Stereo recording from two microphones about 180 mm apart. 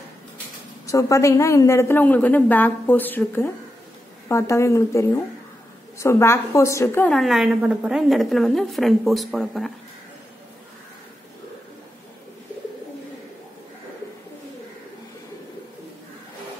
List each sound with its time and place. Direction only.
0.8 s a woman's voice: 15° left (ahead or behind); by 9.7 s centre (ahead or behind)